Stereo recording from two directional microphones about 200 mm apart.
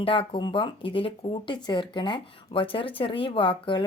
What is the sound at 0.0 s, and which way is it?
Speech, 25° left (ahead or behind).